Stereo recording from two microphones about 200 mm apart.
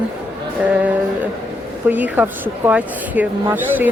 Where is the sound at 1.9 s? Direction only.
10° right (ahead or behind).